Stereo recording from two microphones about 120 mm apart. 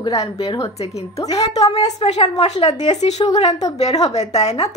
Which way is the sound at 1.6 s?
30° left (ahead or behind).